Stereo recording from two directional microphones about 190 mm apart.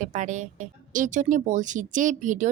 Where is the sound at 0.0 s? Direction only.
40° right (ahead or behind).